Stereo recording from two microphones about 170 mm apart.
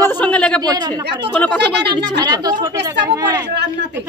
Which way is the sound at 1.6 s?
85° right.